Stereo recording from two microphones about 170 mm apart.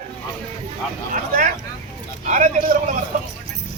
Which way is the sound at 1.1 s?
50° right (ahead or behind).